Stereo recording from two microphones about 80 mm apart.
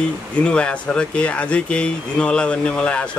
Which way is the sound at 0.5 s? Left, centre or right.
Centre.